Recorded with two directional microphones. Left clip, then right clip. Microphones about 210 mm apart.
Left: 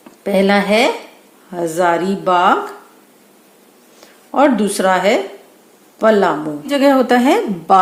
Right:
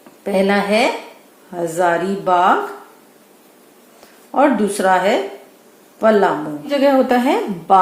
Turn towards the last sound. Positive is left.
turn(degrees=35)  # may be behind; listen again after turning